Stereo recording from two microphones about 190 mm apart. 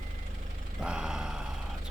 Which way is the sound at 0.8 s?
5° right (ahead or behind).